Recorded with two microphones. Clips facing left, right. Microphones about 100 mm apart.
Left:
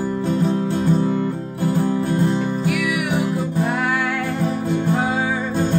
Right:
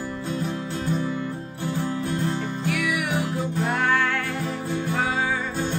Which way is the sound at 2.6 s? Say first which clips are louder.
Left 4 dB; 5° left (ahead or behind).